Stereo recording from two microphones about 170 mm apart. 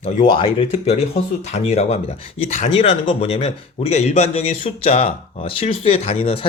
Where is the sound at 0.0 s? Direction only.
35° left (ahead or behind).